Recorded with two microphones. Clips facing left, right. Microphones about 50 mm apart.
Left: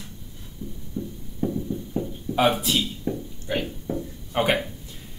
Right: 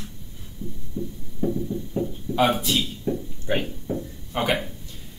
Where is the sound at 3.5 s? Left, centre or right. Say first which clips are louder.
Right 2 dB; right.